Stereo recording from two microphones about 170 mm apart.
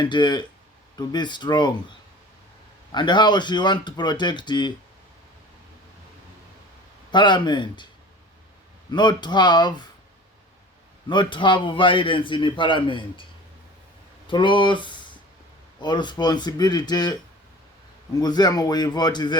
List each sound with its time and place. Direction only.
0.0 s a man's voice: 25° left (ahead or behind)
2.9 s a man's voice: 25° left (ahead or behind)
7.1 s a man's voice: 25° left (ahead or behind)
8.9 s a man's voice: 25° left (ahead or behind)
11.1 s a man's voice: 30° left (ahead or behind)
14.3 s a man's voice: 30° left (ahead or behind)